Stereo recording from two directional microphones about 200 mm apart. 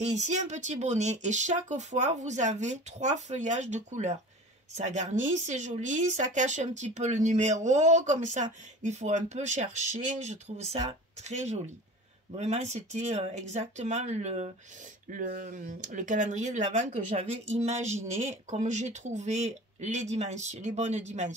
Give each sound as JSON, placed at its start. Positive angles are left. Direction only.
{"t": 0.0, "sound": "speech", "side_deg": -35}